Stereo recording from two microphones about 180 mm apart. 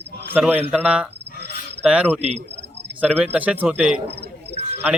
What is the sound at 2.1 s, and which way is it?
Speech, 35° right (ahead or behind).